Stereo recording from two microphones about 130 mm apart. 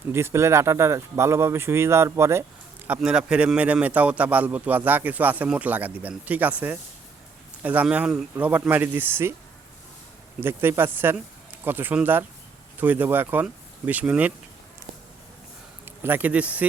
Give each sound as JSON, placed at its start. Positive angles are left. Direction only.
{"t": 0.1, "sound": "speech", "side_deg": -20}
{"t": 2.8, "sound": "a man's voice", "side_deg": -10}
{"t": 10.4, "sound": "a man's voice", "side_deg": -15}
{"t": 16.0, "sound": "a man's voice", "side_deg": -15}